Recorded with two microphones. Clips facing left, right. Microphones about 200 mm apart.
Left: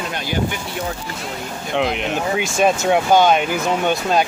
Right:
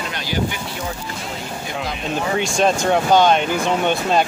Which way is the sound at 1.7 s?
70° left (ahead or behind).